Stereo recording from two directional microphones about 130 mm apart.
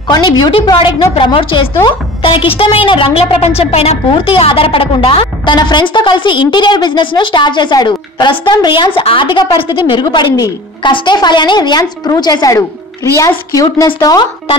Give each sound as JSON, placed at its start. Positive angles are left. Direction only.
{"t": 0.1, "sound": "a woman's voice", "side_deg": 35}
{"t": 13.1, "sound": "a woman's voice", "side_deg": 15}
{"t": 13.8, "sound": "a woman's voice", "side_deg": 35}